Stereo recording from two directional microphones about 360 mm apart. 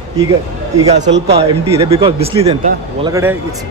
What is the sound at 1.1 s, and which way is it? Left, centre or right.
Speech, right.